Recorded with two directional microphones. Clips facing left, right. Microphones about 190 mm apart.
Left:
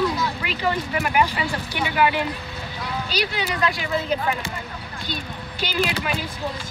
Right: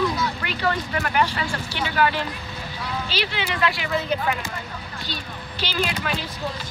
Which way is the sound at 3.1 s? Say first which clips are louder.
Left 3 dB; 40° left (ahead or behind).